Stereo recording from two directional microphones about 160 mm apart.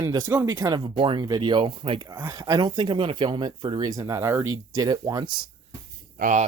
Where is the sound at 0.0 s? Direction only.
20° right (ahead or behind).